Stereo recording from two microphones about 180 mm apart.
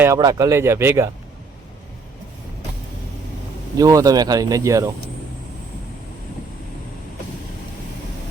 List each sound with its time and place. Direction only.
0.2 s speech: 20° right (ahead or behind)
3.8 s speech: 20° right (ahead or behind)